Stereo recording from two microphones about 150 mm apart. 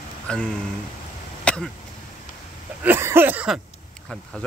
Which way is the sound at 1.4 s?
5° left (ahead or behind).